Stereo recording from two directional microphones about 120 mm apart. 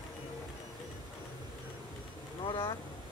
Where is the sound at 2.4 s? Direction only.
50° left (ahead or behind).